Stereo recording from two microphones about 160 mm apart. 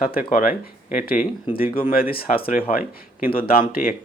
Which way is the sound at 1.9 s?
70° left (ahead or behind).